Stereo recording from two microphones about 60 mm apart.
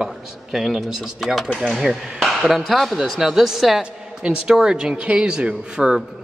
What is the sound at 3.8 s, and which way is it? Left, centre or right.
A woman's voice, centre.